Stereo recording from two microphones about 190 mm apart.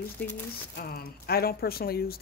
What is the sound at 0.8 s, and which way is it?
Speech, 55° left (ahead or behind).